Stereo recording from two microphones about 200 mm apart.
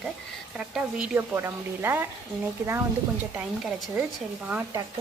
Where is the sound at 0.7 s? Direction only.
5° right (ahead or behind).